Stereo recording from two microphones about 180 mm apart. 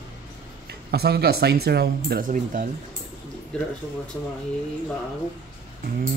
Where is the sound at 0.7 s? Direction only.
65° right (ahead or behind).